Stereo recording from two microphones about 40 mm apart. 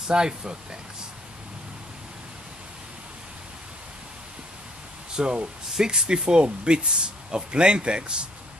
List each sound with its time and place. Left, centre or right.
0.1 s speech: centre
5.1 s speech: centre